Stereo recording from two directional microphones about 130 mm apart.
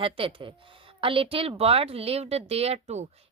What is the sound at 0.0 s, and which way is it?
Speech, 45° right (ahead or behind).